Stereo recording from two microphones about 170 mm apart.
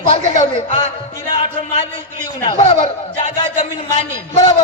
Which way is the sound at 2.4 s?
30° left (ahead or behind).